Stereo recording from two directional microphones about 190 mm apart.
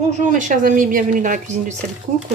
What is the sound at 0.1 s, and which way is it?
A woman's voice, 40° right (ahead or behind).